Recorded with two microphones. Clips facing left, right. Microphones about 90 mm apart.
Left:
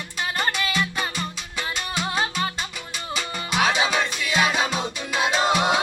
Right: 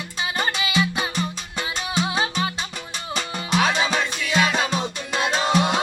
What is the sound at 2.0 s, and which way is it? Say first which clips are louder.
Music: right 1 dB; 5° right (ahead or behind).